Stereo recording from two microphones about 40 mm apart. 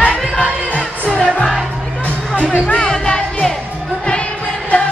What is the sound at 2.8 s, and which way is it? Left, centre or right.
Music, centre.